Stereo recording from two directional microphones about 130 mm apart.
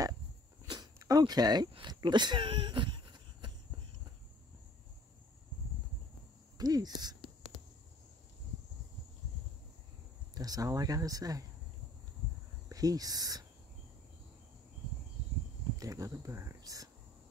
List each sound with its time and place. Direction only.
0.7 s a sound: 30° right (ahead or behind)
6.6 s speech: 30° right (ahead or behind)
10.3 s speech: 30° right (ahead or behind)
12.6 s speech: 25° right (ahead or behind)
15.8 s speech: 25° right (ahead or behind)